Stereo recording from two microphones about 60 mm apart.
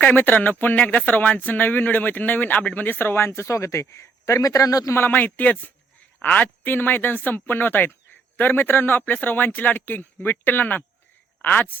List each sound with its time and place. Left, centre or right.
0.0 s speech: left
4.9 s speech: left